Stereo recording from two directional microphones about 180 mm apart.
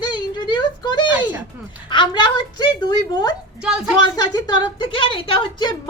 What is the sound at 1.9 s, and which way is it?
A woman's voice, 25° left (ahead or behind).